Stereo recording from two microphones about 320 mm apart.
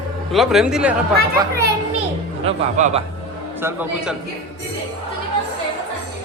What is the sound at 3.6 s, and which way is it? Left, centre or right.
Speech, centre.